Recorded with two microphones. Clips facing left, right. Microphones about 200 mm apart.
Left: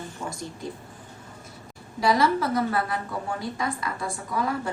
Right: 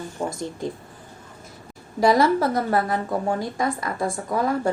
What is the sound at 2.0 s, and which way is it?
A woman's voice, 40° right (ahead or behind).